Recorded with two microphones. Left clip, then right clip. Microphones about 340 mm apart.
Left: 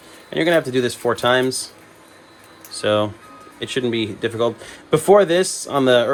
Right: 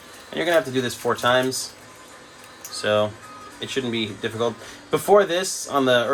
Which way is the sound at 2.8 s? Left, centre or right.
Left.